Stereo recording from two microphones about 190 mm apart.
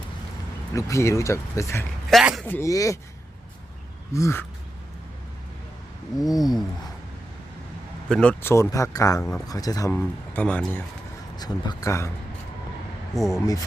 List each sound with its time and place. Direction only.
0.7 s speech: 15° left (ahead or behind)
2.0 s speech: centre (ahead or behind)
2.5 s speech: 15° left (ahead or behind)
4.1 s speech: 15° left (ahead or behind)
6.1 s a sound: centre (ahead or behind)
8.1 s speech: 5° left (ahead or behind)
11.3 s speech: 20° left (ahead or behind)
13.1 s a sound: centre (ahead or behind)